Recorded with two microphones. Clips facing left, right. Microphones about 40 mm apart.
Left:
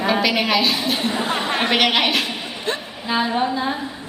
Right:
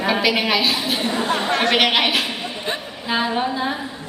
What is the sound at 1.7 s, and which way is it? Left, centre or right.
Speech, centre.